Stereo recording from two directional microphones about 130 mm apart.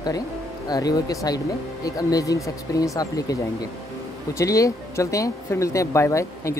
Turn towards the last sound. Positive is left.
turn(degrees=25)  # may be behind; listen again after turning